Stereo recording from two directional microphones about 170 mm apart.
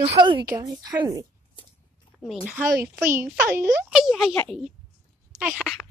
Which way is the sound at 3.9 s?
Centre (ahead or behind).